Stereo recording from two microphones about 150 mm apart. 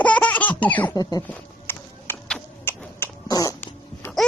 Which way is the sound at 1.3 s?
10° left (ahead or behind).